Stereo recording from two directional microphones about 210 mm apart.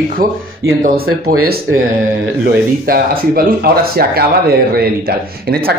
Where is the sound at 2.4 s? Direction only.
45° right (ahead or behind).